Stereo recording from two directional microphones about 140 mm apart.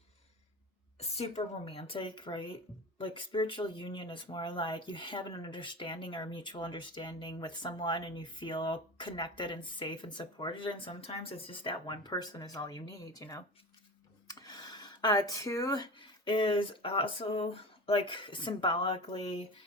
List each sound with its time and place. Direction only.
0.9 s speech: 45° left (ahead or behind)